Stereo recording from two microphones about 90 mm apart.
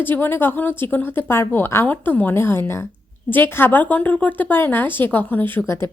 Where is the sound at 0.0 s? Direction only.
20° left (ahead or behind).